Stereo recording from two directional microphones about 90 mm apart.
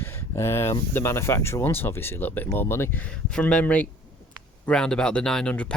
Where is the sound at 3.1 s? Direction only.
10° left (ahead or behind).